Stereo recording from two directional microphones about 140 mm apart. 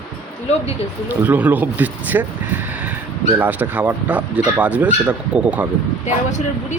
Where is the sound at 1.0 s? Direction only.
15° right (ahead or behind).